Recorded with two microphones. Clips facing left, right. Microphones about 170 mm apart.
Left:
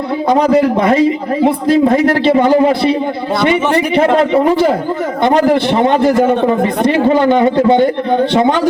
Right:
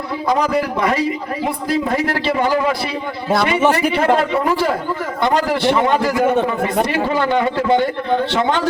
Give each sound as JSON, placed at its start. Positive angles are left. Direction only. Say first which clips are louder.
{"t": 0.3, "sound": "a man's voice", "louder": "left 7 dB", "side_deg": 30}
{"t": 3.9, "sound": "a man's voice", "louder": "left 6 dB", "side_deg": 20}